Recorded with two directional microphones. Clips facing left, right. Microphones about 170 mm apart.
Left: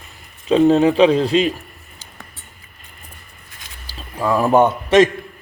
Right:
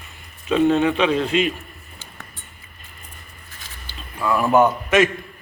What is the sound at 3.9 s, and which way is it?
A man's voice, 35° left (ahead or behind).